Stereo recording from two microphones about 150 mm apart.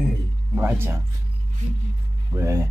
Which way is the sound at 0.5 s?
15° right (ahead or behind).